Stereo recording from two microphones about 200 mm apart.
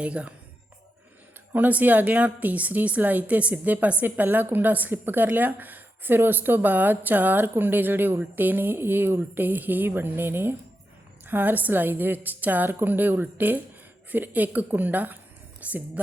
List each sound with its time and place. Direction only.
0.0 s a woman's voice: 5° right (ahead or behind)
1.5 s a woman's voice: 10° right (ahead or behind)